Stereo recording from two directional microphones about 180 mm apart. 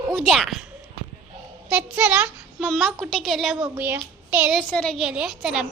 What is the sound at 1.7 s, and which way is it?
A child's voice, 5° right (ahead or behind).